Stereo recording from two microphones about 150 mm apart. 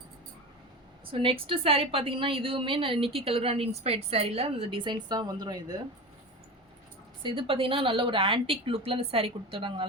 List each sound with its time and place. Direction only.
1.1 s a woman's voice: 35° right (ahead or behind)
7.2 s a woman's voice: 35° right (ahead or behind)